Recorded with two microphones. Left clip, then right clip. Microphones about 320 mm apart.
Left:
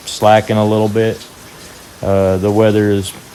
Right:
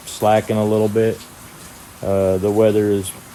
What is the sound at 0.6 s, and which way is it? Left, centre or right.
Speech, left.